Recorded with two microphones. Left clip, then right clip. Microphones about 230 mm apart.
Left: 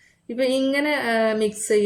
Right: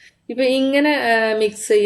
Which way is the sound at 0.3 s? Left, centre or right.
Right.